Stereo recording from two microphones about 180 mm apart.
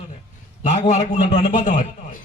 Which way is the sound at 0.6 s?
40° left (ahead or behind).